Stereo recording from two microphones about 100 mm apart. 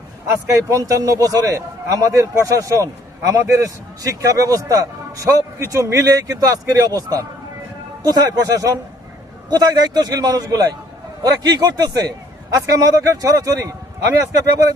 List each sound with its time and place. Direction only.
0.4 s a man's voice: 35° right (ahead or behind)